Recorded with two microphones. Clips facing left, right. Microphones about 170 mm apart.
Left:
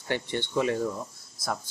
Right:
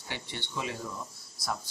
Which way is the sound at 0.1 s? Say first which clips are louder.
Left 11 dB; 50° left (ahead or behind).